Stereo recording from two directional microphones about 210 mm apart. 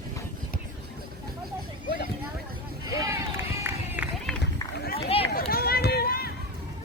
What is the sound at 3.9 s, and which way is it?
Run, 5° right (ahead or behind).